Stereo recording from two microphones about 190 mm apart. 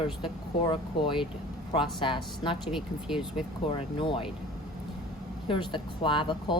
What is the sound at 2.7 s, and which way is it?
Speech, centre (ahead or behind).